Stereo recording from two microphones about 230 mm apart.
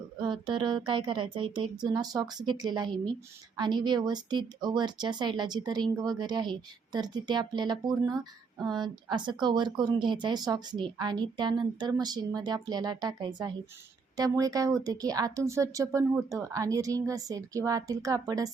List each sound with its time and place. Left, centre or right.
0.2 s speech: centre